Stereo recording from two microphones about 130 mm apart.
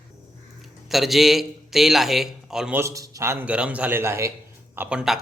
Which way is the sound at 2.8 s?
25° right (ahead or behind).